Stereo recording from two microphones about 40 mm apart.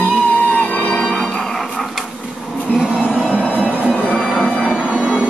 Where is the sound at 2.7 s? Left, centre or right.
Centre.